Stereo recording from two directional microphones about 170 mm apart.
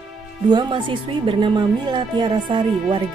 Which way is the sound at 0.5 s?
25° right (ahead or behind).